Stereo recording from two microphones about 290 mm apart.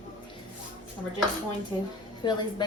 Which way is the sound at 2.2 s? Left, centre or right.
Centre.